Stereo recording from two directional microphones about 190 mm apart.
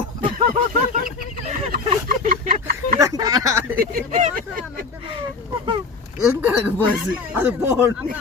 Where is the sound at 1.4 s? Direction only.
40° right (ahead or behind).